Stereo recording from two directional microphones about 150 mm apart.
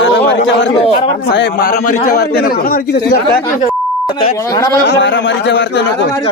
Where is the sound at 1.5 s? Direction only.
90° left.